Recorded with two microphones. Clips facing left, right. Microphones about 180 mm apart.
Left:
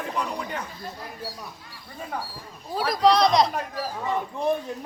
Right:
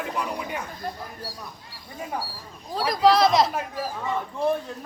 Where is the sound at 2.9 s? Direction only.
Centre (ahead or behind).